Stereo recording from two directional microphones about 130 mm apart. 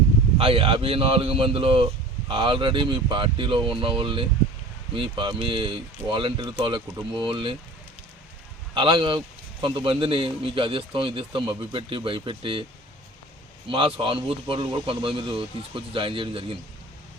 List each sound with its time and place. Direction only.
0.3 s speech: 45° right (ahead or behind)
8.7 s a man's voice: 40° right (ahead or behind)
13.7 s a man's voice: 40° right (ahead or behind)